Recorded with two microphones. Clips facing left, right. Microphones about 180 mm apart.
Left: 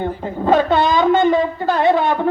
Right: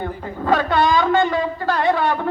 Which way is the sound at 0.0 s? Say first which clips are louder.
Left 5 dB; 20° left (ahead or behind).